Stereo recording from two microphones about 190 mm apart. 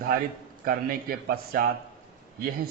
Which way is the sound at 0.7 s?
50° right (ahead or behind).